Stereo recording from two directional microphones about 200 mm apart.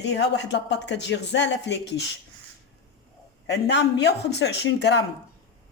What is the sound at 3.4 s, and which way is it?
Speech, 60° left (ahead or behind).